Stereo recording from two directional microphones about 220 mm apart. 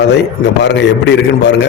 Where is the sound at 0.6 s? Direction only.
50° left (ahead or behind).